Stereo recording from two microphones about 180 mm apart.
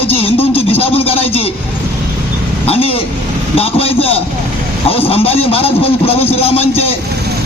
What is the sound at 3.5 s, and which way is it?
Vehicle, 35° left (ahead or behind).